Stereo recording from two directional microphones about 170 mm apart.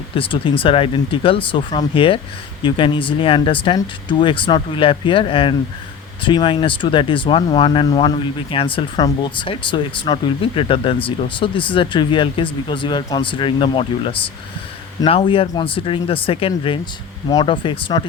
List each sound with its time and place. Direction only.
0.2 s speech: 30° left (ahead or behind)